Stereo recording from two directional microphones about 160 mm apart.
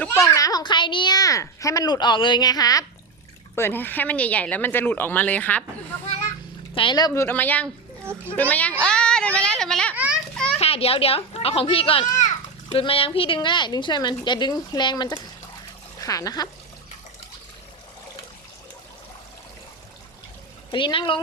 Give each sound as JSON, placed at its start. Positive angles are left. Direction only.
{"t": 0.0, "sound": "a child's voice", "side_deg": 15}
{"t": 6.7, "sound": "speech", "side_deg": 30}
{"t": 9.9, "sound": "children playing", "side_deg": -10}
{"t": 10.6, "sound": "a child's voice", "side_deg": 40}
{"t": 20.7, "sound": "a child's voice", "side_deg": 30}